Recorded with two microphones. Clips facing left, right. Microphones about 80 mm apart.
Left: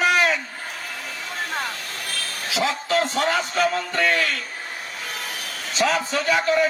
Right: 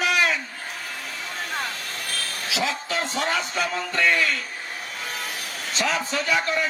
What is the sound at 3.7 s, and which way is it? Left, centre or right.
Speech, left.